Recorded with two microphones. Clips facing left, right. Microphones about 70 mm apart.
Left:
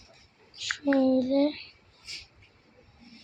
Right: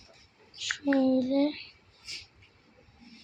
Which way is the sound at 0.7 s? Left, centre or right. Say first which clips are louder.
Left 2 dB; left.